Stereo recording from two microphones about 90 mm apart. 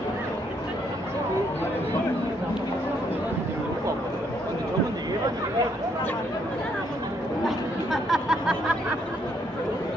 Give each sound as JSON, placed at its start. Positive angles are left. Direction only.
{"t": 7.4, "sound": "chatter", "side_deg": 0}